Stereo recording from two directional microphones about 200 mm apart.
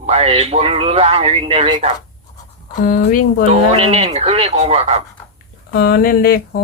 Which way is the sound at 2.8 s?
45° left (ahead or behind).